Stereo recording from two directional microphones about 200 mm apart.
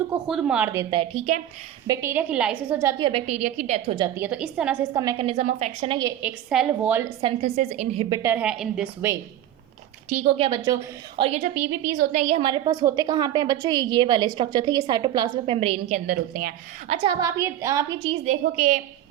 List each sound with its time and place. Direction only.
0.3 s a woman's voice: 5° right (ahead or behind); by 1.4 s 35° right (ahead or behind)
1.9 s a woman's voice: 10° right (ahead or behind)
3.0 s a woman's voice: 30° right (ahead or behind)
3.9 s a woman's voice: 15° right (ahead or behind)
4.9 s a woman's voice: 20° right (ahead or behind)
6.2 s a woman's voice: 5° right (ahead or behind)
7.2 s a woman's voice: 30° right (ahead or behind)
8.1 s a woman's voice: 10° right (ahead or behind)
10.1 s a woman's voice: 30° right (ahead or behind)
16.0 s speech: 50° right (ahead or behind)
16.9 s a woman's voice: 25° right (ahead or behind)
18.0 s a woman's voice: 35° right (ahead or behind)